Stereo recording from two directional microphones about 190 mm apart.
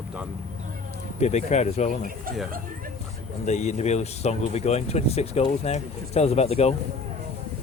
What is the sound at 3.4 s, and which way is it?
Speech, 40° left (ahead or behind).